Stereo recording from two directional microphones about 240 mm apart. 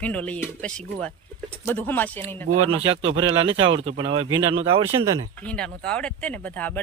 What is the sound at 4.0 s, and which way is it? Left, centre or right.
Speech, right.